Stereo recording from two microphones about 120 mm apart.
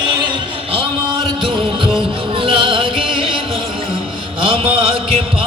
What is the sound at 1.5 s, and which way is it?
Music, 45° right (ahead or behind).